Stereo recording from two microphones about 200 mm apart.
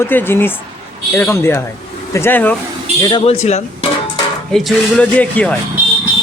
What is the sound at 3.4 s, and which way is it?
Music, 35° left (ahead or behind).